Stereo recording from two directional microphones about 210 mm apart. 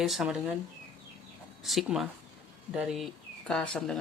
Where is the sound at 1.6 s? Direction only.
Centre (ahead or behind).